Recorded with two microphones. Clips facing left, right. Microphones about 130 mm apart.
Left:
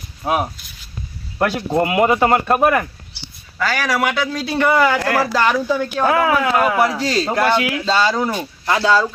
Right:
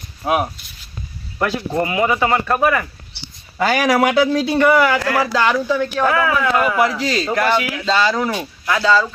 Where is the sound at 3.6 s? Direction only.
20° right (ahead or behind); by 6.0 s 5° left (ahead or behind).